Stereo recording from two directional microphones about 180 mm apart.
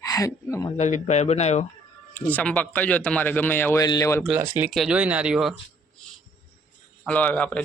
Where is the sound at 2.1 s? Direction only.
10° left (ahead or behind).